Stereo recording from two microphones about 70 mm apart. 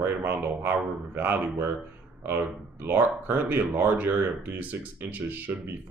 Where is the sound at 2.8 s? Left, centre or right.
Right.